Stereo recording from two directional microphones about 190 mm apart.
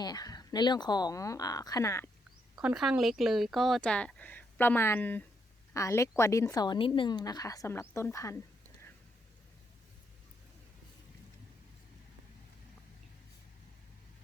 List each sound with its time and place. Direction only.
0.0 s a woman's voice: 20° left (ahead or behind)
2.6 s a woman's voice: centre (ahead or behind); by 8.4 s 15° left (ahead or behind)